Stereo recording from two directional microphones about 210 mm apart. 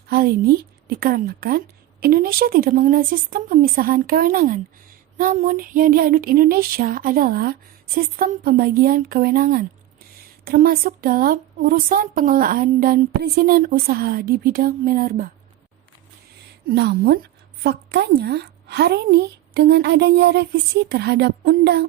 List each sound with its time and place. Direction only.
0.1 s a woman's voice: 45° right (ahead or behind)
16.6 s a woman's voice: 50° right (ahead or behind)